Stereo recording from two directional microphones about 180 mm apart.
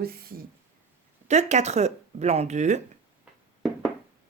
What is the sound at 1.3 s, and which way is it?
Speech, 40° right (ahead or behind).